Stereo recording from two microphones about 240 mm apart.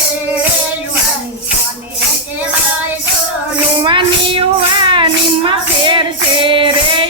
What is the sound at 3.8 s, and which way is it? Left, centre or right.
Child singing, centre.